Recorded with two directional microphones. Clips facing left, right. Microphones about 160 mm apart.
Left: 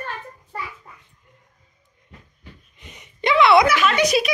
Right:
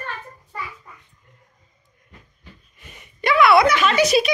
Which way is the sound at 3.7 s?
5° left (ahead or behind).